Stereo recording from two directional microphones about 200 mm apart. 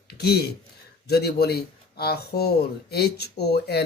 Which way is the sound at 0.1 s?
55° left (ahead or behind).